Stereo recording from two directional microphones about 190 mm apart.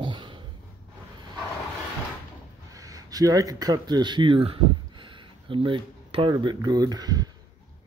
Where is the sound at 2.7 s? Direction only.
20° right (ahead or behind).